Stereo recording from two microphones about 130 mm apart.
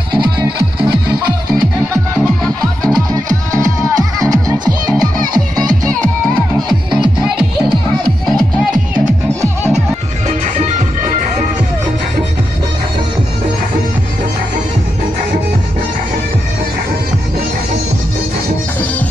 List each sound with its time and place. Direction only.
3.5 s music: 25° right (ahead or behind)
9.4 s music: 20° right (ahead or behind)
10.2 s music: 65° right (ahead or behind)